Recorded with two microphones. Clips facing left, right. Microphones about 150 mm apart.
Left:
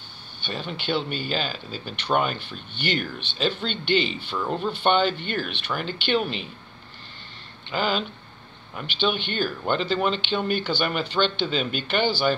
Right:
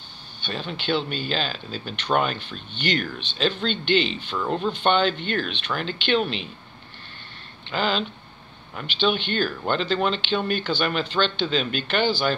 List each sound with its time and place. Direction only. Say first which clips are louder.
0.4 s a sound: right 1 dB; 10° left (ahead or behind)
0.7 s speech: right 2 dB; 10° left (ahead or behind)
7.7 s speech: even; 10° left (ahead or behind)
9.0 s speech: right 2 dB; 10° left (ahead or behind)